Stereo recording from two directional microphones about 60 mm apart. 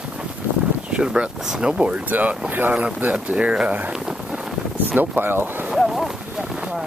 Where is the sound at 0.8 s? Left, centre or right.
Centre.